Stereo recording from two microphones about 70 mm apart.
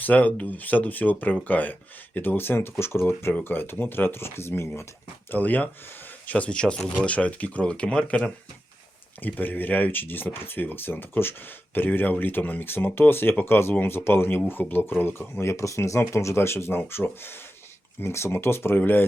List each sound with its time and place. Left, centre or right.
0.0 s speech: left
5.3 s speech: left